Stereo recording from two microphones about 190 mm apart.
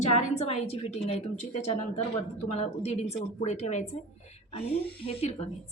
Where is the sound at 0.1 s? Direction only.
35° left (ahead or behind).